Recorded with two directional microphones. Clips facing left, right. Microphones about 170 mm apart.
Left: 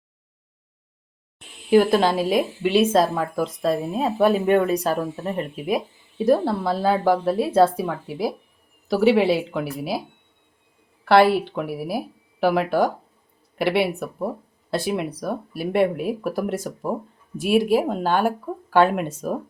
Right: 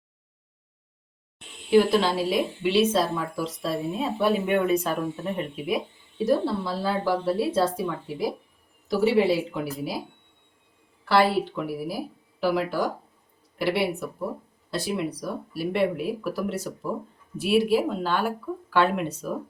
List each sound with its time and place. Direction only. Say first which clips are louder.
1.7 s a woman's voice: left 3 dB; 50° left (ahead or behind)
6.2 s a woman's voice: left 4 dB; 55° left (ahead or behind)
8.9 s speech: left 3 dB; 70° left (ahead or behind)
11.0 s a woman's voice: left 5 dB; 60° left (ahead or behind)